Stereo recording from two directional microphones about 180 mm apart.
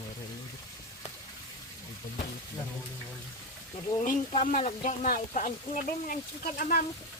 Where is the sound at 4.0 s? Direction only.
45° left (ahead or behind).